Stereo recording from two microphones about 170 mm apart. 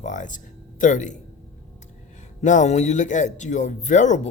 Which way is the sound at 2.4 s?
45° left (ahead or behind).